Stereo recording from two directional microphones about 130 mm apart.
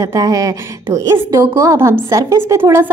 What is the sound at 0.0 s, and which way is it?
A woman's voice, 30° right (ahead or behind).